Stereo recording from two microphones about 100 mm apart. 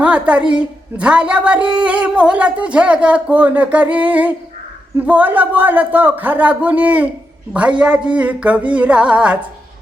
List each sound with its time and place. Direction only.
0.0 s a woman's voice: 10° right (ahead or behind)